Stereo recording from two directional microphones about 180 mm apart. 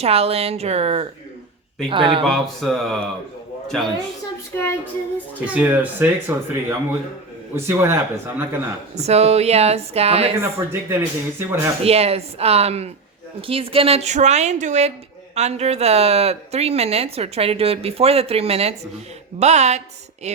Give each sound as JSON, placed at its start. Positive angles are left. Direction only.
{"t": 0.0, "sound": "speech", "side_deg": -35}
{"t": 2.2, "sound": "mantra", "side_deg": 0}
{"t": 4.5, "sound": "child singing", "side_deg": 10}
{"t": 5.5, "sound": "speech", "side_deg": -10}
{"t": 9.0, "sound": "speech", "side_deg": -35}
{"t": 10.3, "sound": "speech", "side_deg": -15}
{"t": 11.8, "sound": "speech", "side_deg": -35}